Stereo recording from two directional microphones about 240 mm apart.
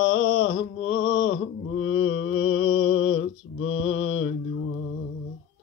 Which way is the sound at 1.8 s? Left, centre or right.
Left.